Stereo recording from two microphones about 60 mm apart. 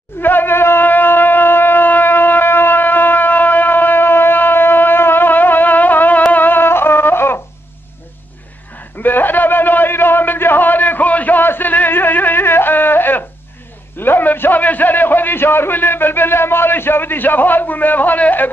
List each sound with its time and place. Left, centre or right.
0.2 s shofar: left
6.3 s music: left
9.0 s a sound: left